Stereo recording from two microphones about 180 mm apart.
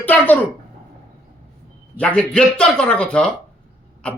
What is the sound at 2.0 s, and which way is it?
A man's voice, 5° left (ahead or behind).